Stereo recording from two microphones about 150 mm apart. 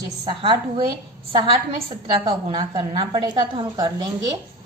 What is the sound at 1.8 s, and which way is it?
A woman's voice, 30° right (ahead or behind).